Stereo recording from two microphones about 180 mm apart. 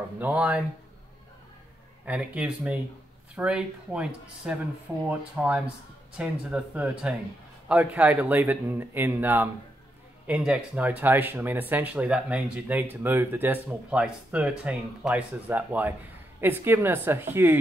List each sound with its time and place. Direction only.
0.2 s speech: 10° right (ahead or behind)
2.0 s speech: 5° right (ahead or behind)